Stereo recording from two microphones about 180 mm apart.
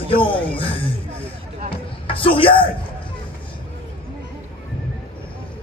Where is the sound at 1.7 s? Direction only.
30° left (ahead or behind).